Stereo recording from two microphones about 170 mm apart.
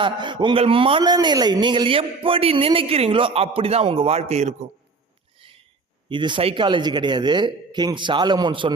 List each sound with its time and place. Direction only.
0.0 s speech: 25° right (ahead or behind)
6.1 s a man's voice: 30° right (ahead or behind)